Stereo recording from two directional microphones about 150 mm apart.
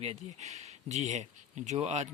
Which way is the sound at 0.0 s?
45° right (ahead or behind).